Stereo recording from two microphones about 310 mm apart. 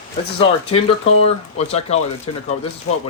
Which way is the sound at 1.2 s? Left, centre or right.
Left.